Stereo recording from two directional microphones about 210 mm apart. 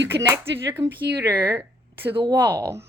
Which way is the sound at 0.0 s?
55° right (ahead or behind).